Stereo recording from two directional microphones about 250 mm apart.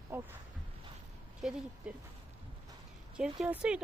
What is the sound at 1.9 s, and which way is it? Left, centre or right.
Speech, centre.